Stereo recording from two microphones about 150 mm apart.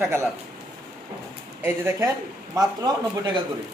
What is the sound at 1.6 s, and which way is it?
Speech, 15° right (ahead or behind).